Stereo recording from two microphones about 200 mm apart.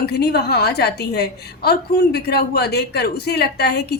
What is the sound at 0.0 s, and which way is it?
A woman's voice, 55° left (ahead or behind).